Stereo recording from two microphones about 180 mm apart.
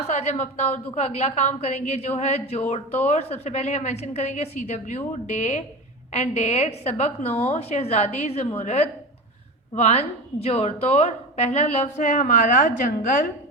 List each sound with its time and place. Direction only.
0.1 s a woman's voice: 40° left (ahead or behind)